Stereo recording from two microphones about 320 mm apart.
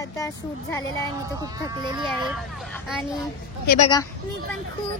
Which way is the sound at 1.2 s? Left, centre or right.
Centre.